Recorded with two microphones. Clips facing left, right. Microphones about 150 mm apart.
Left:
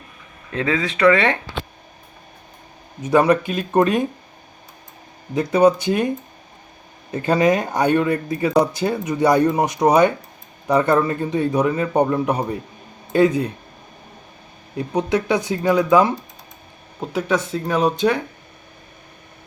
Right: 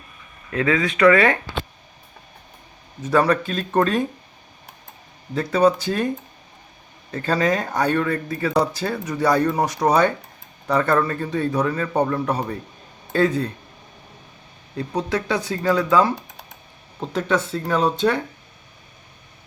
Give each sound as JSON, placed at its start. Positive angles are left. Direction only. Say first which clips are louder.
{"t": 0.5, "sound": "speech", "louder": "right 1 dB", "side_deg": 25}
{"t": 3.0, "sound": "speech", "louder": "left 3 dB", "side_deg": 20}
{"t": 5.3, "sound": "speech", "louder": "left 3 dB", "side_deg": 20}
{"t": 7.1, "sound": "speech", "louder": "left 4 dB", "side_deg": 20}
{"t": 14.8, "sound": "speech", "louder": "left 4 dB", "side_deg": 20}